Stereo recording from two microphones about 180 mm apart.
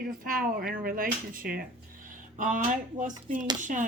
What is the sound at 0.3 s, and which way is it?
Speech, 50° right (ahead or behind).